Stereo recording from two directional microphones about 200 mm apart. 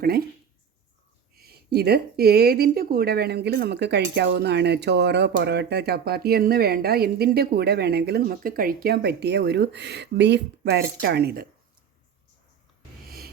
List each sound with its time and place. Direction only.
0.0 s speech: 50° right (ahead or behind)
1.4 s speech: 50° right (ahead or behind)